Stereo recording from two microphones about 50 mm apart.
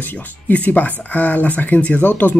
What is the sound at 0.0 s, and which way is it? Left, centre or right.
Speech, left.